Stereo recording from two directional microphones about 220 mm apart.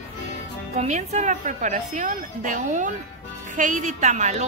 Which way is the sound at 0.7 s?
30° right (ahead or behind).